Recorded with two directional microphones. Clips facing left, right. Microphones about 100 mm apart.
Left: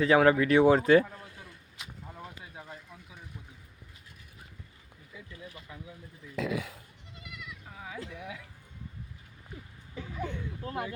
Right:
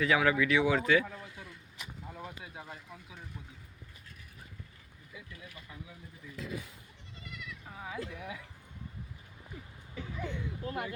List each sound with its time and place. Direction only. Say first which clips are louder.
0.0 s speech: left 5 dB; 35° left (ahead or behind)
2.2 s a sound: even; 5° right (ahead or behind)
6.3 s speech: left 9 dB; 90° left
10.2 s speech: left 2 dB; 40° left (ahead or behind)